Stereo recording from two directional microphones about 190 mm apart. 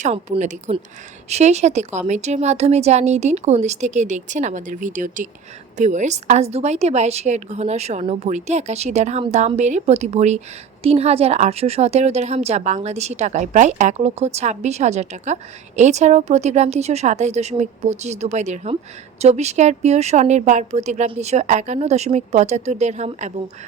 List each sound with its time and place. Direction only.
0.0 s a woman's voice: 40° right (ahead or behind)